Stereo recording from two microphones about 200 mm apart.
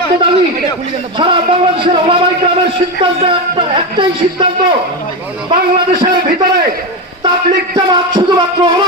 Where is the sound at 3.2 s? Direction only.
25° right (ahead or behind).